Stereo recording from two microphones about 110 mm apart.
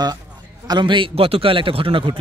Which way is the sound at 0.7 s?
45° right (ahead or behind).